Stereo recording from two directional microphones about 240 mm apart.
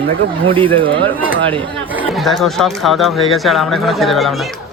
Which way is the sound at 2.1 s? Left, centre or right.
Centre.